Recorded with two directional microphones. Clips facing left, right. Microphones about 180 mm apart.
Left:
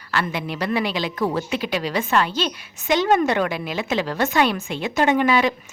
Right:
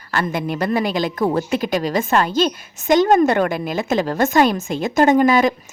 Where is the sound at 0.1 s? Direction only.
45° right (ahead or behind).